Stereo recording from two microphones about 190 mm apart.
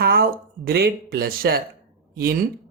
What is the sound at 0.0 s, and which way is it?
Speech, 50° right (ahead or behind).